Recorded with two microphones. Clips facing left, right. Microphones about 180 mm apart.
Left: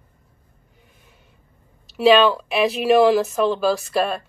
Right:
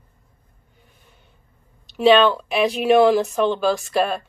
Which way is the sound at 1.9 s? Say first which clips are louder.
Even; 5° left (ahead or behind).